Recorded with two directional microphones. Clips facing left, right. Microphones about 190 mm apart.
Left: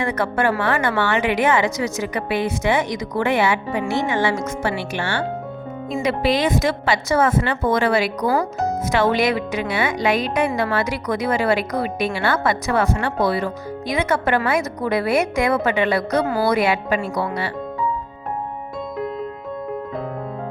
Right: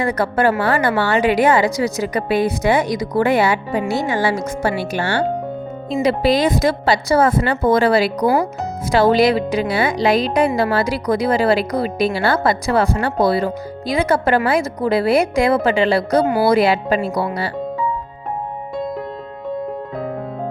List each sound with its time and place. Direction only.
0.0 s speech: 35° right (ahead or behind)
16.2 s speech: 15° right (ahead or behind)
16.5 s speech: 35° right (ahead or behind)